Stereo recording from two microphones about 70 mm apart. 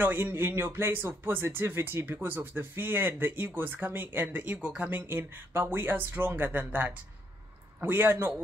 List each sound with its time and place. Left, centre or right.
0.0 s speech: right